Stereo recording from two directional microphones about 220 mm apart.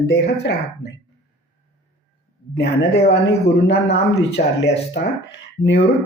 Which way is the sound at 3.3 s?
50° left (ahead or behind).